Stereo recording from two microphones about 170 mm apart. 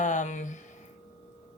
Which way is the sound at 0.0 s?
45° left (ahead or behind).